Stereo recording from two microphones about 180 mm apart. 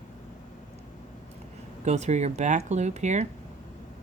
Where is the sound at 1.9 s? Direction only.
40° right (ahead or behind).